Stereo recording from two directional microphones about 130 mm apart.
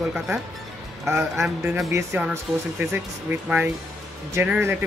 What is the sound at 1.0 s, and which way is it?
Speech, 20° right (ahead or behind).